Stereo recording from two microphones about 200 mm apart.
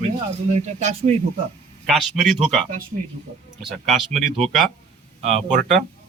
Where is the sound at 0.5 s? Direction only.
35° right (ahead or behind).